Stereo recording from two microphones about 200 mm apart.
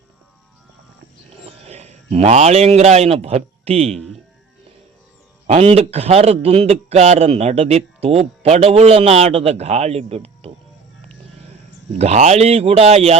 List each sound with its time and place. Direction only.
1.5 s a man's voice: 30° right (ahead or behind)
3.8 s speech: centre (ahead or behind)
5.5 s a man's voice: 30° right (ahead or behind)
11.9 s a man's voice: 35° right (ahead or behind)